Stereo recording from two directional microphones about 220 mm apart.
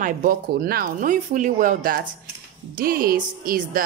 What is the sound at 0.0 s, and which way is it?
Speech, 40° right (ahead or behind).